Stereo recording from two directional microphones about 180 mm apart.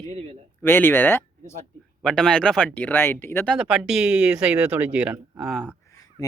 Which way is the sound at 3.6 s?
5° right (ahead or behind).